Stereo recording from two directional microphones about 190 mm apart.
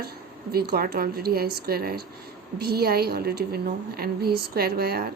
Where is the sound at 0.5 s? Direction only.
55° right (ahead or behind).